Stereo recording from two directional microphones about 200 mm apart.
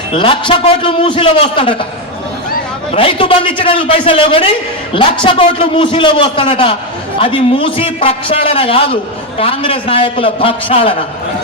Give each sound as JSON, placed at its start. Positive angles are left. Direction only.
{"t": 0.1, "sound": "a man's voice", "side_deg": 25}
{"t": 2.9, "sound": "a man's voice", "side_deg": 25}